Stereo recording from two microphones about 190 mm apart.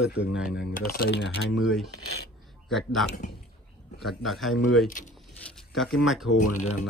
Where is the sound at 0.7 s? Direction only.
50° left (ahead or behind).